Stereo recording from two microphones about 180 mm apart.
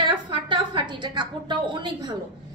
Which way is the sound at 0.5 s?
25° right (ahead or behind).